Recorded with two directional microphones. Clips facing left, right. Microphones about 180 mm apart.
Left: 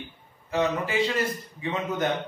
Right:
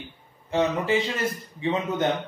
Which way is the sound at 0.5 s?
25° right (ahead or behind).